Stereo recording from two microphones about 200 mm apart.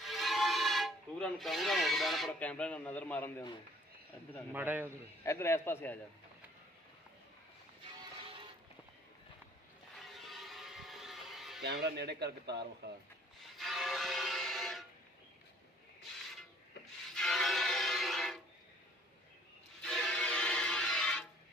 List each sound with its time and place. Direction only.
0.0 s speech: centre (ahead or behind)
4.5 s a man's voice: 10° right (ahead or behind)
5.2 s a man's voice: 15° left (ahead or behind)
8.2 s music: 25° right (ahead or behind)
10.2 s vehicle: centre (ahead or behind)
11.6 s speech: 55° right (ahead or behind)
13.6 s music: centre (ahead or behind)
17.2 s music: centre (ahead or behind)
19.8 s music: centre (ahead or behind)